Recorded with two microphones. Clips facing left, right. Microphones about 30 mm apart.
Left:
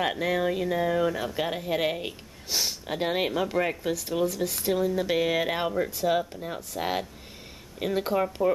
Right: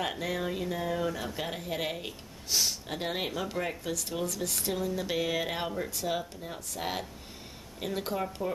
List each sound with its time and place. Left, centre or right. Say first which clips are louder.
0.0 s speech: left 6 dB; centre